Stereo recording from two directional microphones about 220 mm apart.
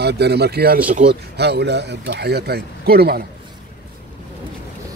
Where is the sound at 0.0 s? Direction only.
50° right (ahead or behind).